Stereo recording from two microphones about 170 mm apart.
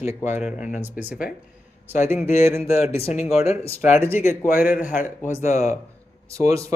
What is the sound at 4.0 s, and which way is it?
Speech, 15° right (ahead or behind).